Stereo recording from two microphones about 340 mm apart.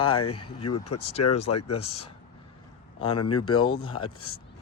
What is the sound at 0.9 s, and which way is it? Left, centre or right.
Speech, centre.